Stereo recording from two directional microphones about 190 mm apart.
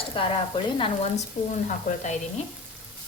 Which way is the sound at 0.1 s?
25° left (ahead or behind).